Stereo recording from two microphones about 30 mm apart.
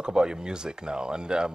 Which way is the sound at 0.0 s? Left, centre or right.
Right.